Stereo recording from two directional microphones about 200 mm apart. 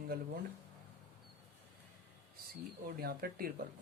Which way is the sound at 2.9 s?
50° right (ahead or behind).